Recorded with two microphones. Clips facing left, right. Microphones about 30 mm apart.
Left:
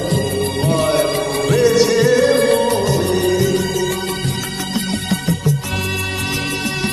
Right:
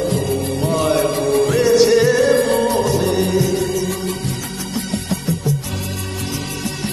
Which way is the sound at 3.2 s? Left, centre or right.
Left.